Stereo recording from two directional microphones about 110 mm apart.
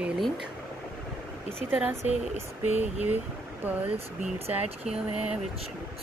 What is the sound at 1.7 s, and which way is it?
Speech, 15° right (ahead or behind).